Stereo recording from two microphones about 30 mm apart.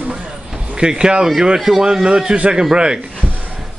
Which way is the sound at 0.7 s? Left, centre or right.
Right.